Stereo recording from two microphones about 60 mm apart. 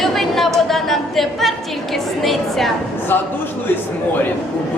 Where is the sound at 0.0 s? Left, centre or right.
Centre.